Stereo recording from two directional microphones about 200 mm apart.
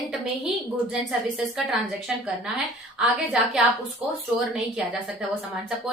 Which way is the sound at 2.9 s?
5° right (ahead or behind).